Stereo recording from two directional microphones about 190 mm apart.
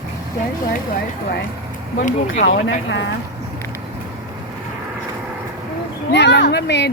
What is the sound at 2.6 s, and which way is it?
Speech, 75° left (ahead or behind).